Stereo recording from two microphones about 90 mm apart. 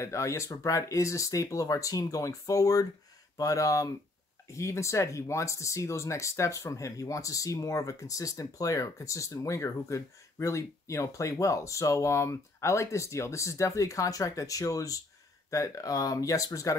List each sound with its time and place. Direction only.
0.0 s speech: 35° left (ahead or behind)